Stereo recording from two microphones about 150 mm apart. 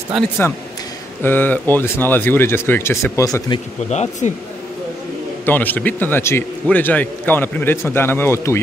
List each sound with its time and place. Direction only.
0.4 s a man's voice: 15° left (ahead or behind)
3.9 s speech: 50° left (ahead or behind)
5.4 s a man's voice: 10° left (ahead or behind)